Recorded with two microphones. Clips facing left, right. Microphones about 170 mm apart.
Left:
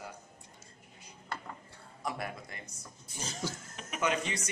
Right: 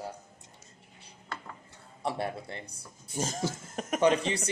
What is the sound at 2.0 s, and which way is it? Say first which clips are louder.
Speech: right 5 dB; 30° right (ahead or behind).